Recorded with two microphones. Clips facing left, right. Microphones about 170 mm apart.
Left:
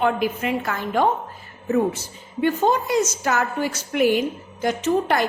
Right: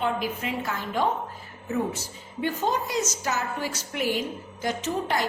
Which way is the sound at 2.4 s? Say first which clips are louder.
Left 7 dB; 60° left (ahead or behind).